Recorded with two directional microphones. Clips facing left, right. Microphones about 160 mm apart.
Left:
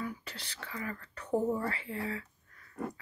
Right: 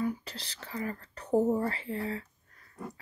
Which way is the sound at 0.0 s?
40° right (ahead or behind).